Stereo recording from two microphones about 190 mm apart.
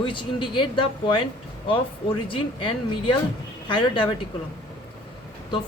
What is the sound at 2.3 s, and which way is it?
Speech, 25° left (ahead or behind).